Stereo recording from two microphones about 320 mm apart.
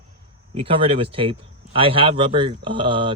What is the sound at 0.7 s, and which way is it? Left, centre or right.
Speech, centre.